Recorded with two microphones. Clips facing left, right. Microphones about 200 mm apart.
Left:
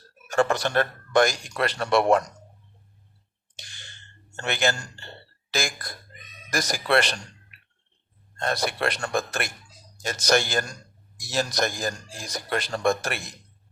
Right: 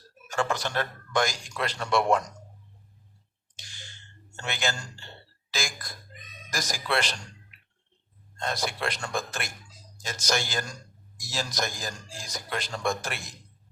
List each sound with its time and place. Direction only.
0.3 s speech: 60° left (ahead or behind)
3.5 s a sound: 65° left (ahead or behind)
4.4 s speech: 60° left (ahead or behind)